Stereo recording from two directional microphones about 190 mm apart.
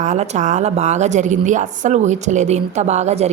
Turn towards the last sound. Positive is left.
turn(degrees=-35)  # may be behind; listen again after turning